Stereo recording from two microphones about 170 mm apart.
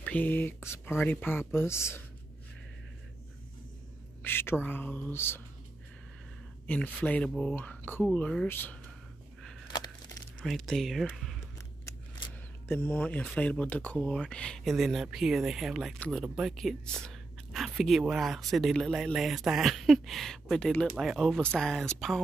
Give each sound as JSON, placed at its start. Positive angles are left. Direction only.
{"t": 0.0, "sound": "speech", "side_deg": 10}
{"t": 4.2, "sound": "speech", "side_deg": 15}
{"t": 7.1, "sound": "speech", "side_deg": 5}
{"t": 9.7, "sound": "a sound", "side_deg": 25}
{"t": 10.4, "sound": "speech", "side_deg": 0}
{"t": 12.6, "sound": "speech", "side_deg": 10}